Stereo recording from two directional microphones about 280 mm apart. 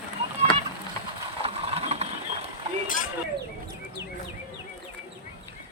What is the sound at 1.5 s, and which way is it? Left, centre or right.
Vehicle, right.